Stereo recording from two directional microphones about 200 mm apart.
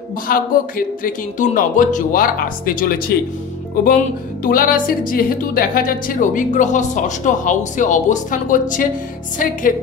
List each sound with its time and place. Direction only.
0.3 s speech: 45° left (ahead or behind)
4.4 s speech: 45° left (ahead or behind)